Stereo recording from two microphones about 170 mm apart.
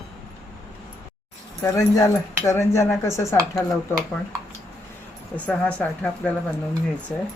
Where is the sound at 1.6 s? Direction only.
20° left (ahead or behind).